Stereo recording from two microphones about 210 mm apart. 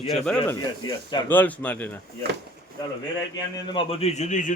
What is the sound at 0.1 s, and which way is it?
Speech, 5° left (ahead or behind).